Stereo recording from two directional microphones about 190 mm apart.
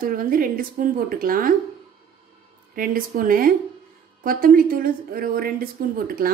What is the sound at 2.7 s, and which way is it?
Speech, 50° right (ahead or behind).